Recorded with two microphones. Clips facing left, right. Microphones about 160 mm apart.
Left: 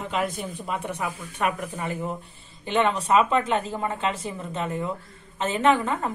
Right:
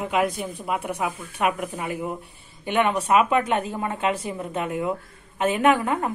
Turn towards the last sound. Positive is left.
turn(degrees=-10)  # may be behind; listen again after turning